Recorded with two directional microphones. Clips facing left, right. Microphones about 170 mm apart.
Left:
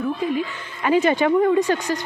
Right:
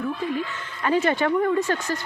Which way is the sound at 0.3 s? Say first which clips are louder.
Left 3 dB; 15° left (ahead or behind).